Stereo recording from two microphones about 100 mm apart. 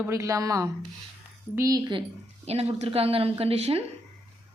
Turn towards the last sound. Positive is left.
turn(degrees=-80)